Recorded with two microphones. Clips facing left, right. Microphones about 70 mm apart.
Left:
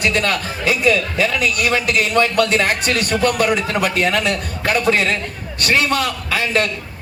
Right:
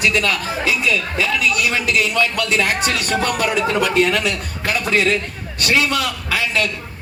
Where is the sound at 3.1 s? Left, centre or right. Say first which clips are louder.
Left 3 dB; right.